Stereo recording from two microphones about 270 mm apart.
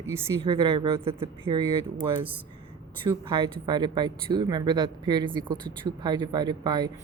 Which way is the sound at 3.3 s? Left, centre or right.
Centre.